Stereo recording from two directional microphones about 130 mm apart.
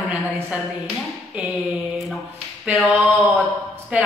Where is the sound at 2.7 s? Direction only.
Centre (ahead or behind).